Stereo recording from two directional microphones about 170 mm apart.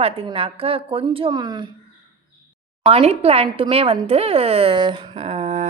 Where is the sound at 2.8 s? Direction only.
35° right (ahead or behind).